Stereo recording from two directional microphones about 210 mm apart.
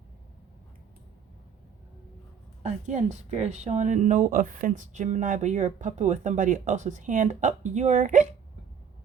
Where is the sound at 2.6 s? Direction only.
35° right (ahead or behind).